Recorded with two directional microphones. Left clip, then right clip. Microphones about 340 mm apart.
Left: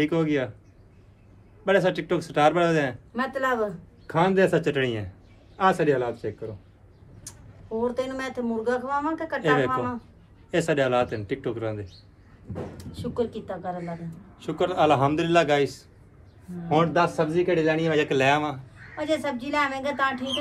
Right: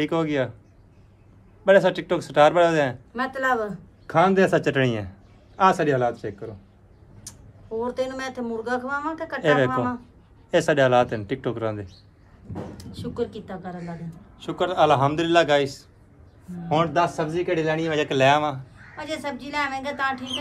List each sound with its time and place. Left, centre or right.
0.0 s speech: centre
1.6 s speech: centre
4.1 s speech: centre
7.3 s a sound: centre
7.8 s speech: centre
10.5 s speech: centre
12.7 s speech: centre